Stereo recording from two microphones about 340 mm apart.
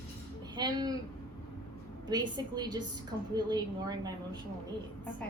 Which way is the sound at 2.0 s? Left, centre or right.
Centre.